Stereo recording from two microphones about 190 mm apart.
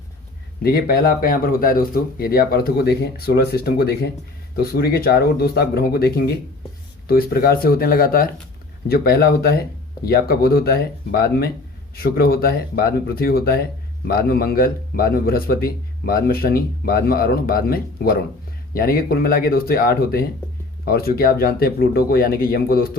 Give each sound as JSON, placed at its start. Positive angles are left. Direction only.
{"t": 0.6, "sound": "speech", "side_deg": 50}